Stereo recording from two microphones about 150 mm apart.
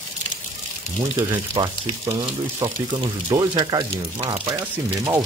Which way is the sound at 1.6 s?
35° right (ahead or behind).